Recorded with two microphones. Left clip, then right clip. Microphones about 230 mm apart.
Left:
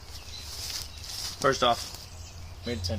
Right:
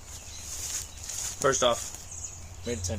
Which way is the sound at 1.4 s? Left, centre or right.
Centre.